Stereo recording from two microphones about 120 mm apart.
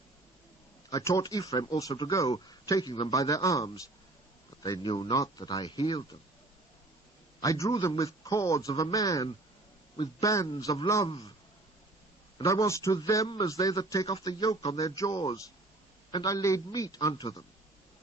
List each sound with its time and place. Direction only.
0.9 s a man's voice: 30° left (ahead or behind)
5.1 s speech: 30° left (ahead or behind)
7.4 s speech: 30° left (ahead or behind)
12.4 s speech: 25° left (ahead or behind)